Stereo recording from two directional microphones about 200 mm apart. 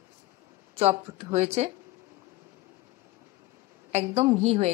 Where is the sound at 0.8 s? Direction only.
30° right (ahead or behind).